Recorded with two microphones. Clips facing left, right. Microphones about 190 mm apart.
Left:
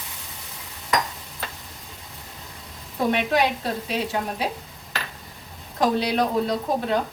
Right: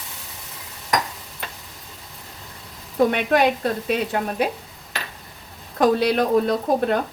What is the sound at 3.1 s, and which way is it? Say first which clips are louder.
Speech: right 3 dB; 55° right (ahead or behind).